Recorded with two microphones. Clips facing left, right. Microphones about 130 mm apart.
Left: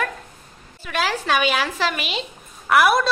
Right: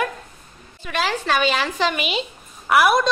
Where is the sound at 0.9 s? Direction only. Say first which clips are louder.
Even; 5° left (ahead or behind).